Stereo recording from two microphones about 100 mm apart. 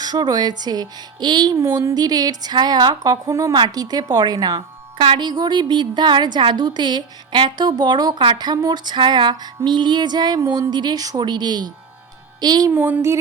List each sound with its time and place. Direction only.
0.0 s a woman's voice: 45° right (ahead or behind)
1.5 s a woman's voice: 25° right (ahead or behind)
3.5 s a woman's voice: 45° right (ahead or behind)
12.7 s speech: 20° right (ahead or behind)